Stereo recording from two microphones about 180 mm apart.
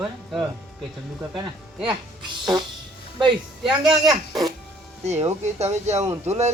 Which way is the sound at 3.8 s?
25° right (ahead or behind).